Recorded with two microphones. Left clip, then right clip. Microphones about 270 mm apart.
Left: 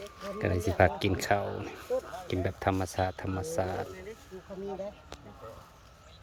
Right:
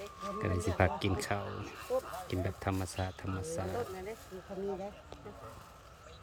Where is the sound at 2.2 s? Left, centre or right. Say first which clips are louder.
Left 6 dB; centre.